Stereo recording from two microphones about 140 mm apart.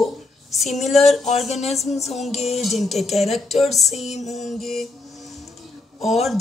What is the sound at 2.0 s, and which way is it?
Music, centre (ahead or behind).